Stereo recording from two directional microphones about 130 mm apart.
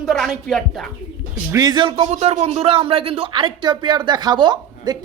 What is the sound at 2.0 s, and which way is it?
Speech, 55° right (ahead or behind).